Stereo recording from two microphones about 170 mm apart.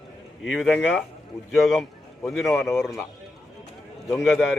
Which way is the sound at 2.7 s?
15° left (ahead or behind).